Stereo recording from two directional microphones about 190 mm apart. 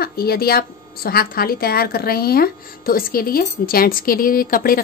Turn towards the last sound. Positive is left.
turn(degrees=50)  # may be behind; listen again after turning